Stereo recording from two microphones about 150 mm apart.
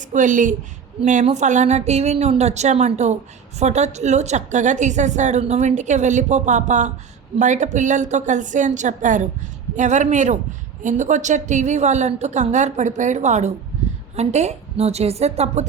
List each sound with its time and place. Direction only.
0.1 s a woman's voice: 60° right (ahead or behind)